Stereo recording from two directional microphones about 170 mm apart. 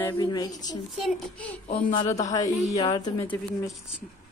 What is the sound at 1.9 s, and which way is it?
Speech, 25° left (ahead or behind).